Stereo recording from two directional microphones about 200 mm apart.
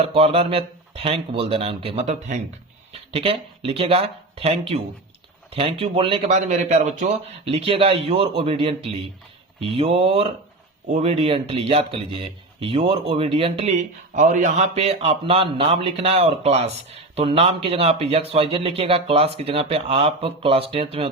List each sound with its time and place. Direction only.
0.0 s speech: 30° right (ahead or behind)